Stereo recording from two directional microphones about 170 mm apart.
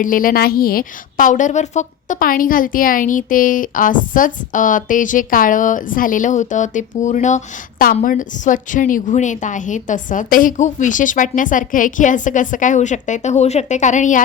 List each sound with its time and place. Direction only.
0.0 s a woman's voice: 55° left (ahead or behind)